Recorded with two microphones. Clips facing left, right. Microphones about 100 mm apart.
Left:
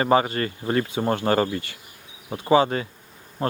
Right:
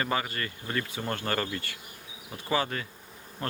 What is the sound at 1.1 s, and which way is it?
Speech, 25° left (ahead or behind).